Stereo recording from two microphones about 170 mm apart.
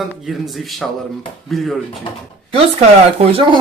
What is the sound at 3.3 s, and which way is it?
Speech, 30° right (ahead or behind).